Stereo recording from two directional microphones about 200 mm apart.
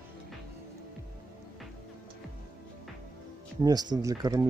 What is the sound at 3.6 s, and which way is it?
Speech, 20° right (ahead or behind).